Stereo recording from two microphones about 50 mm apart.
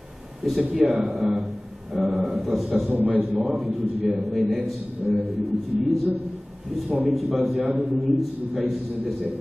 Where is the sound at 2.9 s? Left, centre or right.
Right.